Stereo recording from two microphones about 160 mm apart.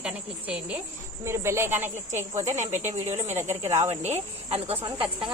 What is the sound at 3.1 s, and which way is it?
Speech, 45° right (ahead or behind).